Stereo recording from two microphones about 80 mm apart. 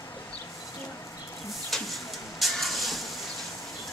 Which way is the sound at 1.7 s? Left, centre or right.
Centre.